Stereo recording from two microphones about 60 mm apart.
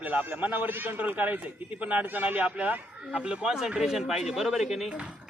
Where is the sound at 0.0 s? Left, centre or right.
Right; by 5.0 s centre.